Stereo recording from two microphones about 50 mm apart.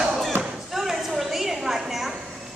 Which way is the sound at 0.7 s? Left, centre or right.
Centre.